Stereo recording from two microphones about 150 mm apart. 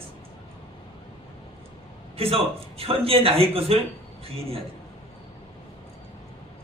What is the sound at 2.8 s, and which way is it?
A man's voice, 40° right (ahead or behind).